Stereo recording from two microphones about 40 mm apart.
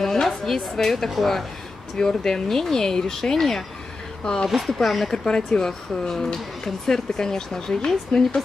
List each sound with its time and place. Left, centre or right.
0.0 s a woman's voice: centre
2.0 s speech: centre
4.2 s speech: left
4.6 s speech: centre
5.1 s speech: centre